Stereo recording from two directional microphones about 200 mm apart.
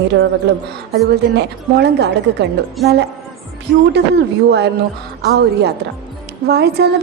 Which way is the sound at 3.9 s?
55° right (ahead or behind).